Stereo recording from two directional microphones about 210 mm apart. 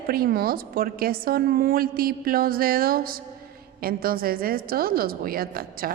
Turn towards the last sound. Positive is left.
turn(degrees=-45)  # may be behind; listen again after turning